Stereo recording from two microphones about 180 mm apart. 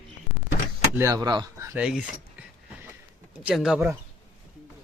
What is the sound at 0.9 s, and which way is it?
Speech, 15° right (ahead or behind).